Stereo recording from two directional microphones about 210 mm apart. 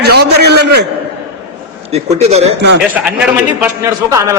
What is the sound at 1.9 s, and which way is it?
Speech, 30° right (ahead or behind).